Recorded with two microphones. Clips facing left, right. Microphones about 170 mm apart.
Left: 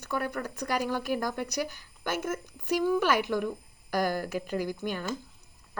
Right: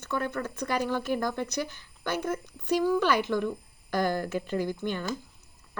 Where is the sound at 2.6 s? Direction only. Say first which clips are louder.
Right 1 dB; 15° left (ahead or behind).